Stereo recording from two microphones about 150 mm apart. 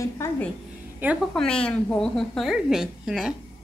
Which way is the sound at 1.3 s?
5° left (ahead or behind).